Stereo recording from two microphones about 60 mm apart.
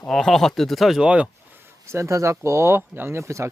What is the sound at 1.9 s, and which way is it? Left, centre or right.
Speech, right.